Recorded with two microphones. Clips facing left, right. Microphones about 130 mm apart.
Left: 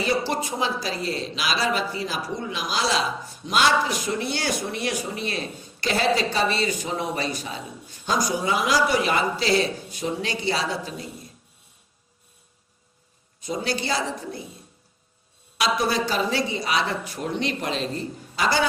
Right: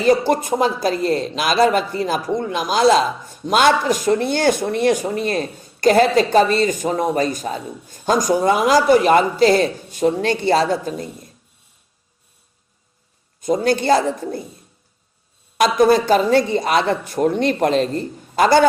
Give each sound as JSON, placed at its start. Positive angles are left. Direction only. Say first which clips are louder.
{"t": 0.0, "sound": "speech", "louder": "right 9 dB", "side_deg": -50}
{"t": 13.4, "sound": "speech", "louder": "right 10 dB", "side_deg": -50}
{"t": 15.5, "sound": "speech", "louder": "right 10 dB", "side_deg": -50}